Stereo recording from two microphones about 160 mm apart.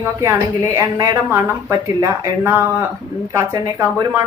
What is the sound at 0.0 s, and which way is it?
A woman's voice, 20° right (ahead or behind).